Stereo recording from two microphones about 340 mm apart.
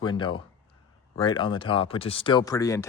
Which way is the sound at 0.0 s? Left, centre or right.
Centre.